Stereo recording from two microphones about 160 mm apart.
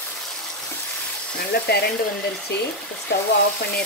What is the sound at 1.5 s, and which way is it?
Frying, 85° left.